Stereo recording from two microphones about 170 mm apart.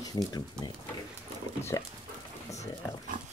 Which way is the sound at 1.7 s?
20° left (ahead or behind).